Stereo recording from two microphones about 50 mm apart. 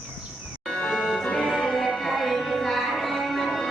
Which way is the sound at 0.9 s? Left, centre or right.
Centre.